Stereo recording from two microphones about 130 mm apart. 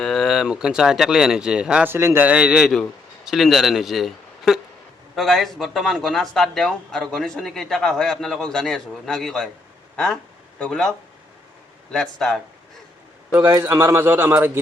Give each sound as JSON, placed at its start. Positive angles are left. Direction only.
{"t": 0.0, "sound": "speech", "side_deg": 0}
{"t": 1.9, "sound": "a man's voice", "side_deg": -20}
{"t": 13.4, "sound": "a man's voice", "side_deg": -25}